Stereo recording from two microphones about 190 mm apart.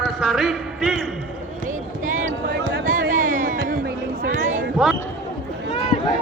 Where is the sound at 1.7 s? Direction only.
40° right (ahead or behind).